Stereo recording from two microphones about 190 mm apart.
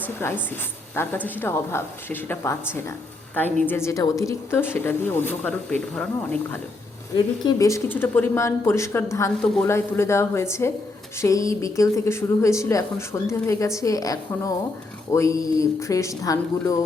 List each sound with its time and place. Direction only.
0.0 s speech: 10° left (ahead or behind)